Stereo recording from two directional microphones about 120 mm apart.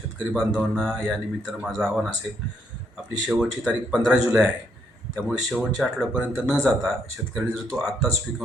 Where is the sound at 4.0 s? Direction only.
5° right (ahead or behind).